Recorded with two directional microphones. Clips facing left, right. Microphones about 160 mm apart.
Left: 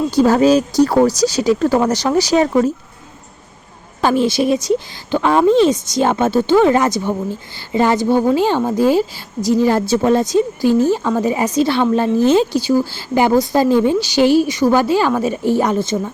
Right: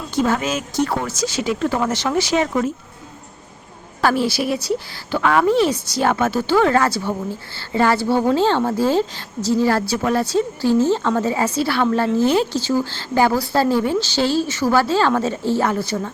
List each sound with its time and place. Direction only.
0.1 s speech: 35° left (ahead or behind)
4.0 s speech: 20° left (ahead or behind)